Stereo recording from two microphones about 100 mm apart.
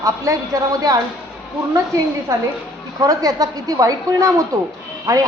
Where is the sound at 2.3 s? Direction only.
30° right (ahead or behind).